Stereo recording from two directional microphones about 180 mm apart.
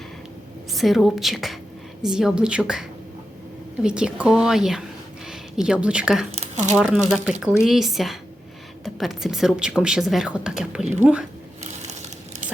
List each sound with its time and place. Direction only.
0.7 s speech: centre (ahead or behind)
3.8 s a woman's voice: 5° right (ahead or behind)
6.3 s a sound: 40° right (ahead or behind)
6.7 s speech: centre (ahead or behind)